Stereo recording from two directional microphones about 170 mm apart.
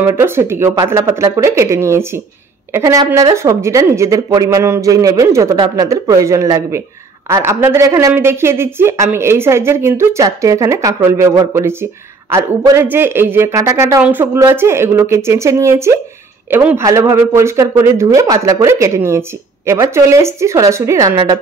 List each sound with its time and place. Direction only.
0.0 s speech: 15° right (ahead or behind)